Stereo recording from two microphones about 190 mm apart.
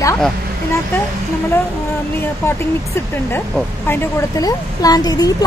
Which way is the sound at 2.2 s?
10° left (ahead or behind).